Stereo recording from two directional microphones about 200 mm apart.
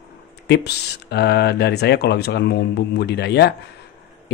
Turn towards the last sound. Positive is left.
turn(degrees=55)  # may be behind; listen again after turning